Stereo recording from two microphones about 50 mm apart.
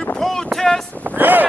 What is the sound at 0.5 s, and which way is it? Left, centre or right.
Speech, centre.